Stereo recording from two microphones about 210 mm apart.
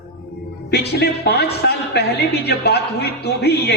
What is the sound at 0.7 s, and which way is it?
A man's voice, 50° left (ahead or behind).